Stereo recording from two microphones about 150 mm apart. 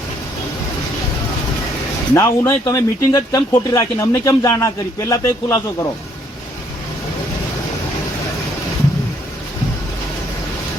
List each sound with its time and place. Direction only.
2.1 s speech: 15° left (ahead or behind)